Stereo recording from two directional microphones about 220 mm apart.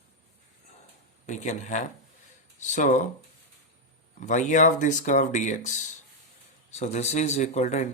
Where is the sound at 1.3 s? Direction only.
35° left (ahead or behind).